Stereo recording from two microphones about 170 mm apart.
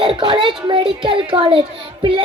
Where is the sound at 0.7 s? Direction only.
30° right (ahead or behind).